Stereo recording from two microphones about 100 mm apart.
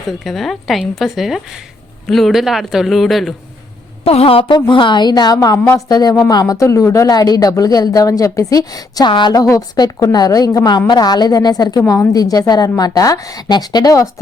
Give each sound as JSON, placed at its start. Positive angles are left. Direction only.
{"t": 0.1, "sound": "a woman's voice", "side_deg": 0}
{"t": 4.0, "sound": "a woman's voice", "side_deg": 75}
{"t": 4.7, "sound": "a woman's voice", "side_deg": 55}